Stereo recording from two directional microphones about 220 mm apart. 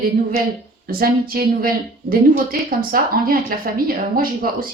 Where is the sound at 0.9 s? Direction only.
40° right (ahead or behind).